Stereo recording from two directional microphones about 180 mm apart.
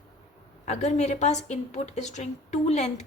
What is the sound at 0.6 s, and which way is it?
A woman's voice, 40° left (ahead or behind).